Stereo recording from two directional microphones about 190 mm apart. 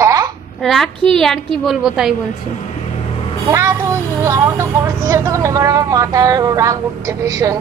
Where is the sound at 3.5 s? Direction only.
15° right (ahead or behind).